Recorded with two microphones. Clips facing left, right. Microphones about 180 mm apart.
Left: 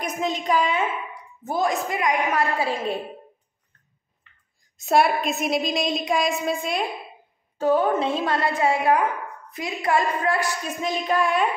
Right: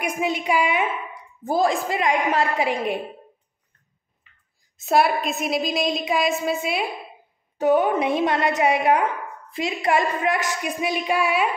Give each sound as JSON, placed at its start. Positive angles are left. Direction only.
{"t": 0.0, "sound": "a woman's voice", "side_deg": -10}
{"t": 1.4, "sound": "a woman's voice", "side_deg": -30}
{"t": 2.6, "sound": "a woman's voice", "side_deg": -15}
{"t": 4.7, "sound": "a woman's voice", "side_deg": 0}
{"t": 7.5, "sound": "a woman's voice", "side_deg": -15}